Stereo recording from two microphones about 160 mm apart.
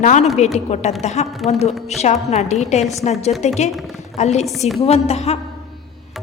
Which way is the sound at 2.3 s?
45° left (ahead or behind).